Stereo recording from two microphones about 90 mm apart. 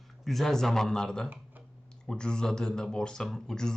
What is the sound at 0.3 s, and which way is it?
Speech, 5° left (ahead or behind).